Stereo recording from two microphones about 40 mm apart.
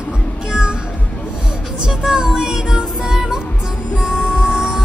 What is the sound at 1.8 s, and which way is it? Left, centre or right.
Music, centre.